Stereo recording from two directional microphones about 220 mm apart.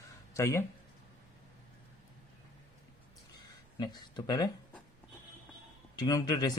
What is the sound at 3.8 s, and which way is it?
Speech, 15° left (ahead or behind).